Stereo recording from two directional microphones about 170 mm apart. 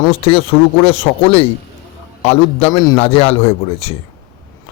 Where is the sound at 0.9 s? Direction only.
35° left (ahead or behind).